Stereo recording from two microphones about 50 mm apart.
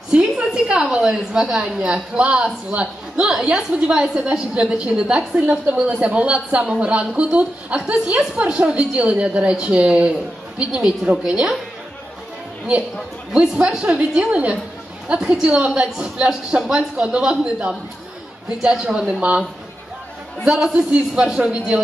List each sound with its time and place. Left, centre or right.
0.1 s a sound: centre
0.7 s a woman's voice: right
13.3 s a woman's voice: centre
15.1 s a woman's voice: centre
20.4 s a woman's voice: centre